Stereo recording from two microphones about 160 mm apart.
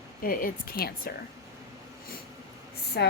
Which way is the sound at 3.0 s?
90° left.